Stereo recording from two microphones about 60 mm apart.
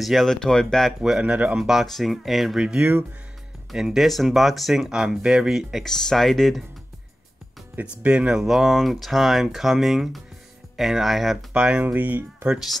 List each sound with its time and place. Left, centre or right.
0.0 s speech: centre
0.3 s speech: centre
1.2 s speech: right
1.6 s speech: centre
2.6 s speech: centre
8.0 s speech: centre
11.5 s speech: centre